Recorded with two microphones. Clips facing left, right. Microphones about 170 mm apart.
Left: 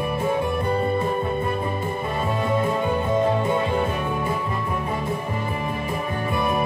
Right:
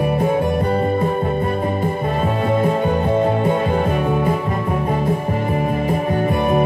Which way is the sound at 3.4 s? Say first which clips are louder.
Right 4 dB; 50° right (ahead or behind).